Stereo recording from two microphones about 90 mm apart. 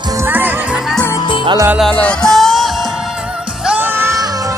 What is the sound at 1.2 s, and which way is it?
Music, 65° left (ahead or behind).